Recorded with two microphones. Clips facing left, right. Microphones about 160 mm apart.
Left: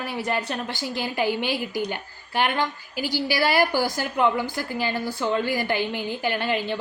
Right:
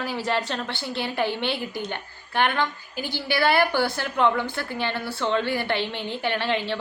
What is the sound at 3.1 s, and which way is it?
Speech, 60° right (ahead or behind).